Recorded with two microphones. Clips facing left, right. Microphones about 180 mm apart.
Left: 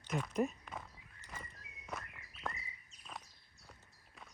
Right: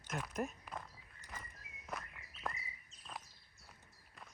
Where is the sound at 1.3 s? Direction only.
Centre (ahead or behind).